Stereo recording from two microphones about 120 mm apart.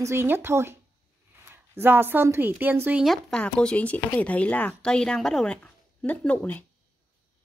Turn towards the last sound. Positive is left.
turn(degrees=15)  # may be behind; listen again after turning